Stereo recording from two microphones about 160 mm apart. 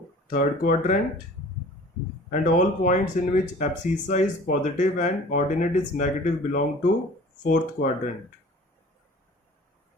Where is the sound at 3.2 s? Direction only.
55° left (ahead or behind).